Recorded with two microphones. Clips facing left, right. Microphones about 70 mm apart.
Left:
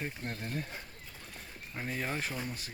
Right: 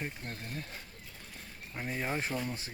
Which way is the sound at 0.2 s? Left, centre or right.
Centre.